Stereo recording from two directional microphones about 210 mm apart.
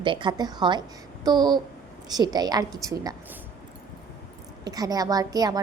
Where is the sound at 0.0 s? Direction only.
25° right (ahead or behind).